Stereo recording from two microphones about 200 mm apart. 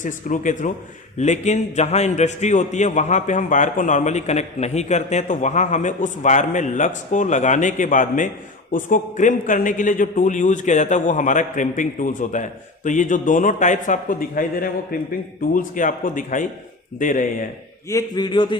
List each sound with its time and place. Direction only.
0.0 s a man's voice: 40° left (ahead or behind)
17.8 s a man's voice: 20° left (ahead or behind)